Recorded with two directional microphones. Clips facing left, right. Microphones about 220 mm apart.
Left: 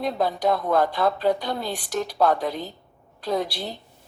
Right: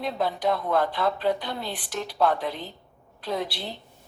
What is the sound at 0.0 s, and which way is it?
A woman's voice, 45° left (ahead or behind).